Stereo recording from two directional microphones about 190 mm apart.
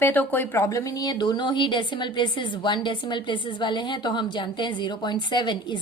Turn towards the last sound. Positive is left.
turn(degrees=25)  # may be behind; listen again after turning